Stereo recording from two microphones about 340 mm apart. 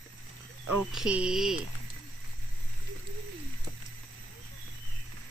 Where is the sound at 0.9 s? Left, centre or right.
Centre.